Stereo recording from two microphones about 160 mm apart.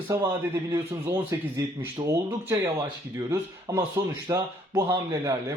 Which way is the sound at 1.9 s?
20° right (ahead or behind).